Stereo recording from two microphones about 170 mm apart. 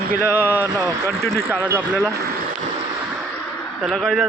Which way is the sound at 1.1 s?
15° right (ahead or behind).